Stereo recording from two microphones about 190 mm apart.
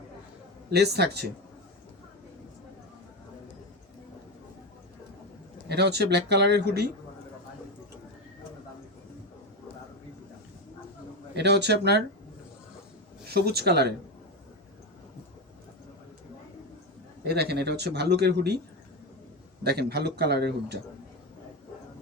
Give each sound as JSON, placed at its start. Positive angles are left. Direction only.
{"t": 0.7, "sound": "speech", "side_deg": -60}
{"t": 5.6, "sound": "speech", "side_deg": -60}
{"t": 11.3, "sound": "speech", "side_deg": -65}
{"t": 13.2, "sound": "speech", "side_deg": -55}
{"t": 17.2, "sound": "speech", "side_deg": -60}
{"t": 19.6, "sound": "speech", "side_deg": -60}